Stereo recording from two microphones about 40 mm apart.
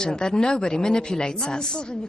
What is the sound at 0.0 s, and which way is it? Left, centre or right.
A woman's voice, centre.